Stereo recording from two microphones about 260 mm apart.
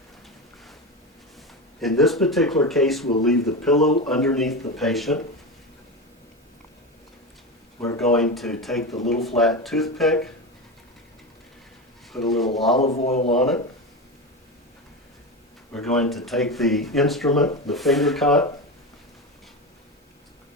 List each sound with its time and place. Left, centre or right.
1.8 s speech: centre
7.9 s speech: centre
12.1 s speech: centre
12.8 s a man's voice: left
13.3 s speech: centre
15.7 s speech: centre